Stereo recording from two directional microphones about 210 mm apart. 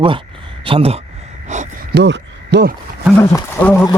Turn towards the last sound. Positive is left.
turn(degrees=10)  # may be behind; listen again after turning